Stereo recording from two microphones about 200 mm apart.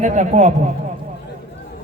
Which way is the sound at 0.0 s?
35° right (ahead or behind).